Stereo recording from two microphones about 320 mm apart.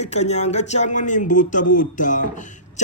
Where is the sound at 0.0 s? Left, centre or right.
Left.